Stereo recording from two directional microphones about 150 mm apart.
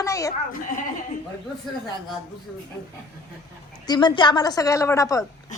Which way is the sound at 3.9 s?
30° left (ahead or behind).